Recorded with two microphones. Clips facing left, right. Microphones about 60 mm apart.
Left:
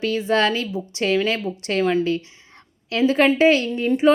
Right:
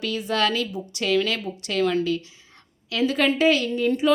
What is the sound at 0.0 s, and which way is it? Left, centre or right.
A woman's voice, left.